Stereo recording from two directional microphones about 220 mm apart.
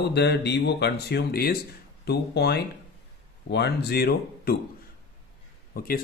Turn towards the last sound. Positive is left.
turn(degrees=40)  # may be behind; listen again after turning